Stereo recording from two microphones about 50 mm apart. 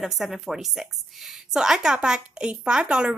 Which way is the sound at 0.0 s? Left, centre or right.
Centre.